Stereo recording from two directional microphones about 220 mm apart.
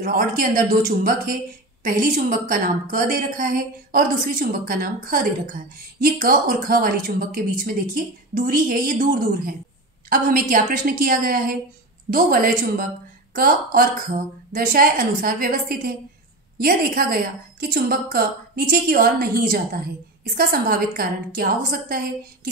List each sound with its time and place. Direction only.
0.4 s a woman's voice: 40° right (ahead or behind)